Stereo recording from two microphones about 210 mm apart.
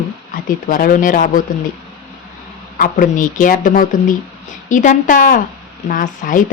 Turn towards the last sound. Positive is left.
turn(degrees=40)  # may be behind; listen again after turning